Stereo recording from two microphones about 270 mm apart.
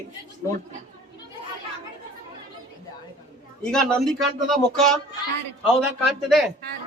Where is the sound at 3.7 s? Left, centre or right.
Centre.